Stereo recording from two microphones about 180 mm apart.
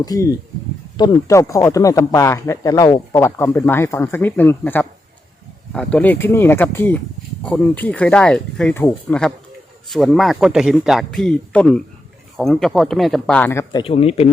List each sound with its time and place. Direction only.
0.0 s speech: 20° left (ahead or behind)
13.8 s speech: 35° left (ahead or behind)